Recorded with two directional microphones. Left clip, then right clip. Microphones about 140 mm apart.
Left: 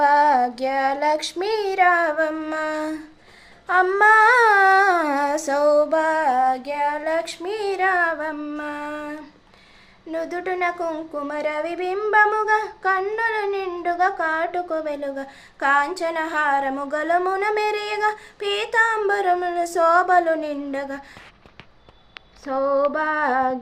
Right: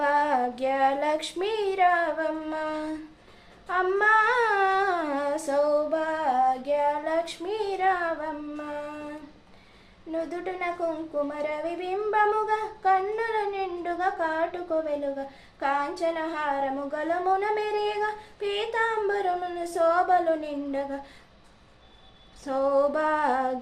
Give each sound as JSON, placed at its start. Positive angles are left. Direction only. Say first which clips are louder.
{"t": 0.0, "sound": "child singing", "louder": "left 8 dB", "side_deg": 15}
{"t": 1.5, "sound": "speech", "louder": "left 5 dB", "side_deg": 30}
{"t": 3.7, "sound": "humming", "louder": "left 7 dB", "side_deg": 45}
{"t": 10.1, "sound": "speech", "louder": "left 5 dB", "side_deg": 45}
{"t": 11.3, "sound": "a sound", "louder": "left 6 dB", "side_deg": 45}
{"t": 15.5, "sound": "speech", "louder": "left 8 dB", "side_deg": 55}
{"t": 22.4, "sound": "female singing", "louder": "left 3 dB", "side_deg": 15}